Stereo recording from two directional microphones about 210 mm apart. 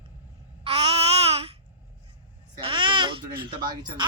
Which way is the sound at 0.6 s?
30° right (ahead or behind).